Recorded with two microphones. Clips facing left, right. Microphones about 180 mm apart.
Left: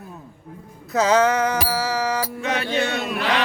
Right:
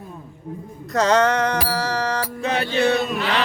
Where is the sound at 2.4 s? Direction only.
35° right (ahead or behind).